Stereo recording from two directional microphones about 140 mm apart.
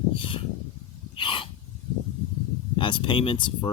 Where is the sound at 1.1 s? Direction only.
40° left (ahead or behind).